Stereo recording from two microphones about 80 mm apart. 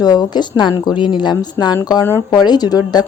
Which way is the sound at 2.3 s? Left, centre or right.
Left.